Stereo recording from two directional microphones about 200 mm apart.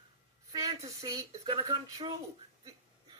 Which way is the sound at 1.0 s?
15° right (ahead or behind).